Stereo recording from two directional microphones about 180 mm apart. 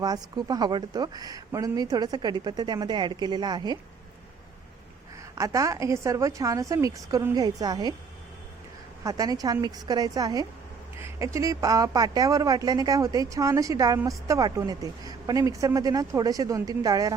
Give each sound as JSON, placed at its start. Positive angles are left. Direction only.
{"t": 0.0, "sound": "speech", "side_deg": -20}
{"t": 5.3, "sound": "speech", "side_deg": -20}
{"t": 9.0, "sound": "speech", "side_deg": -20}